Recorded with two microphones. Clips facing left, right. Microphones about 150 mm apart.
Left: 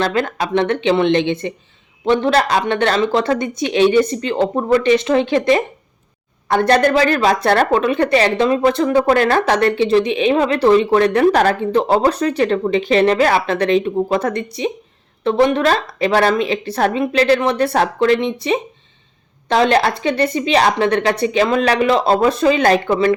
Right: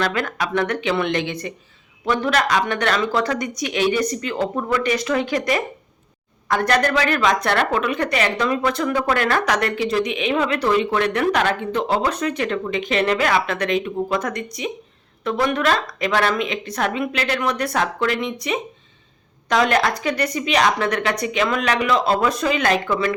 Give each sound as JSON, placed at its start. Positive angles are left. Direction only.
{"t": 0.0, "sound": "a woman's voice", "side_deg": 30}